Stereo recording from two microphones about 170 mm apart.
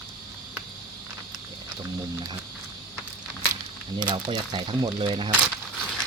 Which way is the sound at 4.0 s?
25° right (ahead or behind).